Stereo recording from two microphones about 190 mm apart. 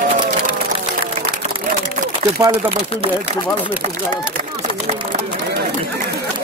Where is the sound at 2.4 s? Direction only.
20° right (ahead or behind).